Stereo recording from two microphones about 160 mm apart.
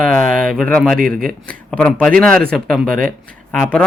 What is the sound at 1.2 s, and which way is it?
Speech, 65° right (ahead or behind).